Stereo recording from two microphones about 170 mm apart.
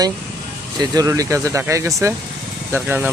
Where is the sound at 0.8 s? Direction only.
20° right (ahead or behind).